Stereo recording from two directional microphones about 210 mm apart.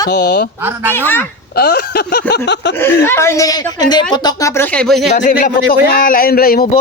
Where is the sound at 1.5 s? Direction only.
50° left (ahead or behind).